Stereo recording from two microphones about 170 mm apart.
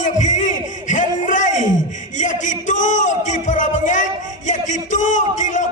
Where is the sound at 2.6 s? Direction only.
50° left (ahead or behind).